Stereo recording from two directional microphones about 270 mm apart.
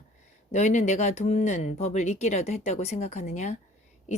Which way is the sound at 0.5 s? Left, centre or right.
Left.